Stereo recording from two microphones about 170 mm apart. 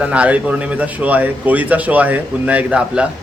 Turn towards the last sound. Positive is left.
turn(degrees=-5)  # may be behind; listen again after turning